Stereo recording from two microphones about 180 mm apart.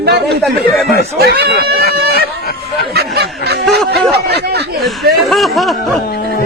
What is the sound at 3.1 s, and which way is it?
Snicker, 65° right (ahead or behind).